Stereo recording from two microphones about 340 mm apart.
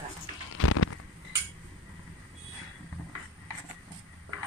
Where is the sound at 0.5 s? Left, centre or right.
Left.